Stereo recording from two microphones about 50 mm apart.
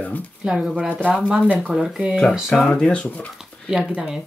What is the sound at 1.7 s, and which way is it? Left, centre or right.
Speech, centre.